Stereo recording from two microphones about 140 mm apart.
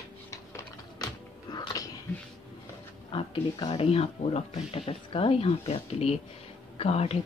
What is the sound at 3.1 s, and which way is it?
Speech, 40° left (ahead or behind).